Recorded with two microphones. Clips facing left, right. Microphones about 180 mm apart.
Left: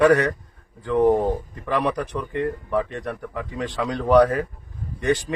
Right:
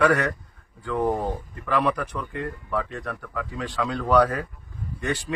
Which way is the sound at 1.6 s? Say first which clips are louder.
Left 1 dB; 20° left (ahead or behind).